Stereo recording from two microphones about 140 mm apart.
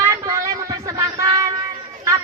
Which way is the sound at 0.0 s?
20° right (ahead or behind).